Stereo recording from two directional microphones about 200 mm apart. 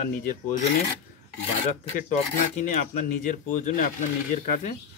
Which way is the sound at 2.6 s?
40° left (ahead or behind).